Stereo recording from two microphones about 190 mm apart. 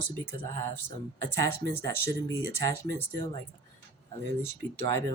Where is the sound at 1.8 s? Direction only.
15° left (ahead or behind).